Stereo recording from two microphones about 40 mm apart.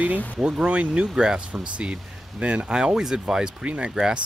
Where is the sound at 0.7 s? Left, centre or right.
Right.